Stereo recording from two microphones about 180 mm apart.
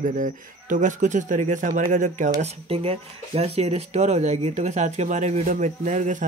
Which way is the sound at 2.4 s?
35° right (ahead or behind).